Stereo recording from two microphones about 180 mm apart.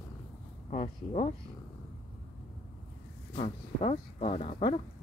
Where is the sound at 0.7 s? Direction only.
40° left (ahead or behind).